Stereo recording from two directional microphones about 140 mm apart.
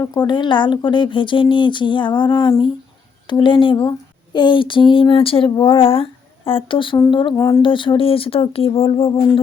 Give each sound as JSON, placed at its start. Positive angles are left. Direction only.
{"t": 0.0, "sound": "speech", "side_deg": 30}
{"t": 7.3, "sound": "speech", "side_deg": 20}
{"t": 7.6, "sound": "speech", "side_deg": 35}